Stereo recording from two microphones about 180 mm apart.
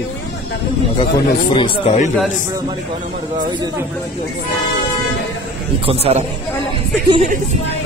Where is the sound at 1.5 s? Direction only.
30° left (ahead or behind).